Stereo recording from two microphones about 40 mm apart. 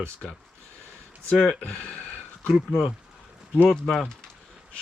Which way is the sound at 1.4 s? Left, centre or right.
Left.